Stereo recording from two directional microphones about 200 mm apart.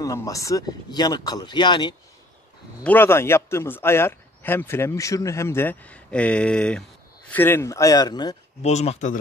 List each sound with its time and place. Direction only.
0.0 s speech: 15° left (ahead or behind)
2.8 s a man's voice: 10° left (ahead or behind)
8.6 s speech: 35° left (ahead or behind)